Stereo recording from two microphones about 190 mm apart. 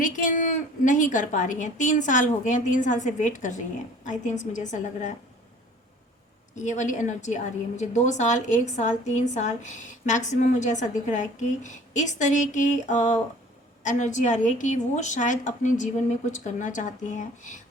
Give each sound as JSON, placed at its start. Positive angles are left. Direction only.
{"t": 0.0, "sound": "a woman's voice", "side_deg": 45}
{"t": 6.6, "sound": "a woman's voice", "side_deg": 40}